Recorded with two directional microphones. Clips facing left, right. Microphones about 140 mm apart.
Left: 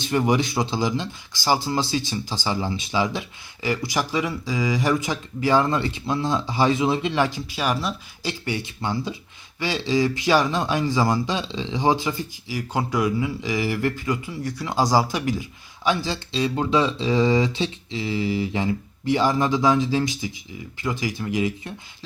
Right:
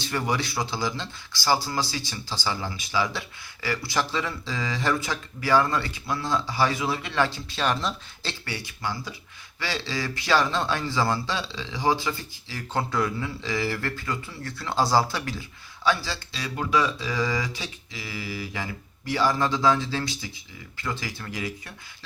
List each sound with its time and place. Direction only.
0.0 s a man's voice: 20° left (ahead or behind)